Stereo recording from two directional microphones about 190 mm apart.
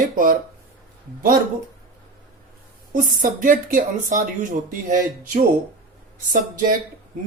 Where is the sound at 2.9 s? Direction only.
45° right (ahead or behind).